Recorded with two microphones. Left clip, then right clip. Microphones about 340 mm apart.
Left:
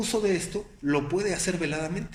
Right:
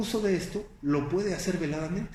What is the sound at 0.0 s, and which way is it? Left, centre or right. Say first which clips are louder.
Speech: left 2 dB; left.